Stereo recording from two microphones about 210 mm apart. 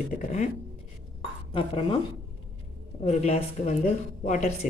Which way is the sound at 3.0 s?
30° left (ahead or behind).